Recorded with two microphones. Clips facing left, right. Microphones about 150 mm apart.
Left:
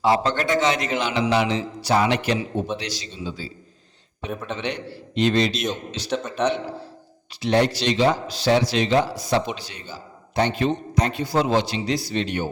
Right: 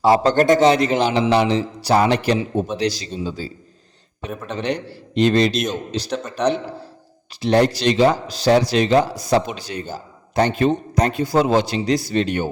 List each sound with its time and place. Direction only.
0.0 s a man's voice: 35° right (ahead or behind)
4.3 s speech: centre (ahead or behind)
4.5 s a man's voice: 40° right (ahead or behind)
6.1 s speech: centre (ahead or behind)
7.4 s a man's voice: 40° right (ahead or behind)